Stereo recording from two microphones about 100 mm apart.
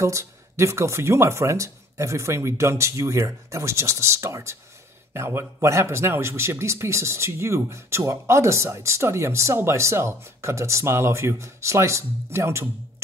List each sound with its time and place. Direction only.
0.0 s speech: 30° right (ahead or behind)